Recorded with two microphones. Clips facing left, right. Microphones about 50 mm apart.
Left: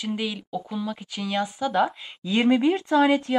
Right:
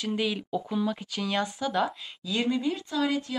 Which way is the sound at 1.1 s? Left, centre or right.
Centre.